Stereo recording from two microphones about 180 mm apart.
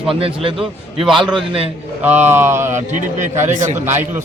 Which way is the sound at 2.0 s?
10° right (ahead or behind).